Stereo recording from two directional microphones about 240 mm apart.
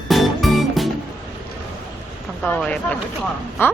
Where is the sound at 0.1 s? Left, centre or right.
Centre.